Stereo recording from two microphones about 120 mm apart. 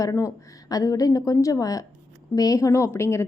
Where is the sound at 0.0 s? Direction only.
25° left (ahead or behind).